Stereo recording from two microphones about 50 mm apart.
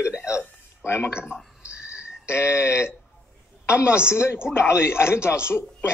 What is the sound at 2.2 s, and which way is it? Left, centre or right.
Speech, left.